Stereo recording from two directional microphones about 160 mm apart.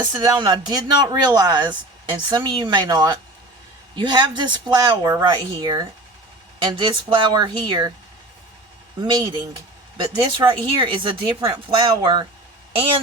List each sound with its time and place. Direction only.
0.0 s speech: 25° right (ahead or behind)
9.0 s speech: 30° right (ahead or behind)